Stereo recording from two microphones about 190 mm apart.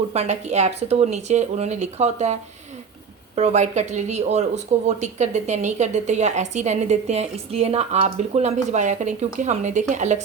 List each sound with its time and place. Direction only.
0.1 s speech: 35° right (ahead or behind)